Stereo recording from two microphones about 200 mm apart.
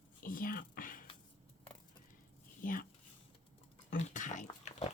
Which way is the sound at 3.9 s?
40° left (ahead or behind).